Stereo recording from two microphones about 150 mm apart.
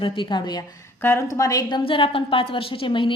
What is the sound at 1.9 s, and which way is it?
A woman's voice, 35° left (ahead or behind).